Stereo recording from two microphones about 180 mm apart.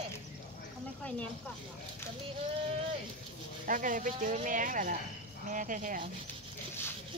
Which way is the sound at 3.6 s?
50° right (ahead or behind).